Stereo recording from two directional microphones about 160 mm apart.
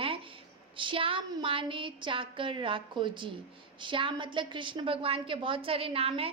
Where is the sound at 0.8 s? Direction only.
30° right (ahead or behind).